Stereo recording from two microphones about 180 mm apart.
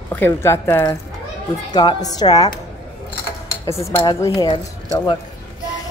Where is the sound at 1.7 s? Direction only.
25° left (ahead or behind).